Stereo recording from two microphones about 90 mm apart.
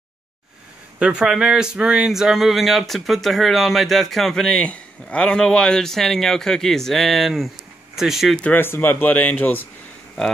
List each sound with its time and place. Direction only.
0.9 s speech: 10° right (ahead or behind)
8.5 s speech: 25° left (ahead or behind)